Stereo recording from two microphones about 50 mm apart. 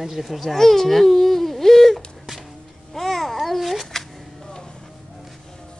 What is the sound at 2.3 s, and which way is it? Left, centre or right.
Music, centre.